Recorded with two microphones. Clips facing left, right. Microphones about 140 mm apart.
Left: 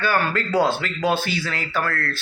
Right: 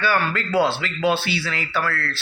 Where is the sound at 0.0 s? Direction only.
45° left (ahead or behind).